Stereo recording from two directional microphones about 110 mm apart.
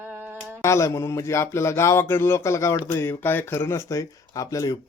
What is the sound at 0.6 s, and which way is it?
Speech, 25° left (ahead or behind).